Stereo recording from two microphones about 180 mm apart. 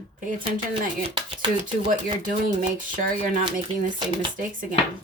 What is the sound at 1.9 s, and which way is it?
Speech, 50° right (ahead or behind).